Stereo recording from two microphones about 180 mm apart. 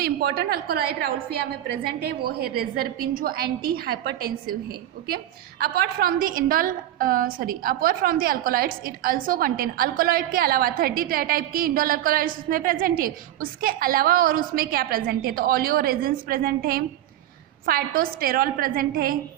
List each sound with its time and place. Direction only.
0.0 s a woman's voice: 60° right (ahead or behind)